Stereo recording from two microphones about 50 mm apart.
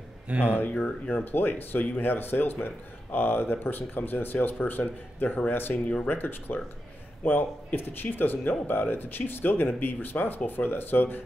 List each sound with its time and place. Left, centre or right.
0.3 s speech: right
0.6 s speech: left
1.1 s speech: left